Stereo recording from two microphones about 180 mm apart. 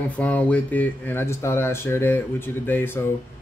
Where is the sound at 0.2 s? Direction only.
10° left (ahead or behind).